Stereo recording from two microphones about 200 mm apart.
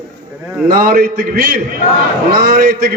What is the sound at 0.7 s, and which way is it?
A man's voice, 45° right (ahead or behind).